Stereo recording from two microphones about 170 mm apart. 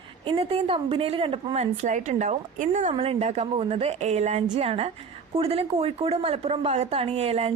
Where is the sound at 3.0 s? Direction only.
35° right (ahead or behind).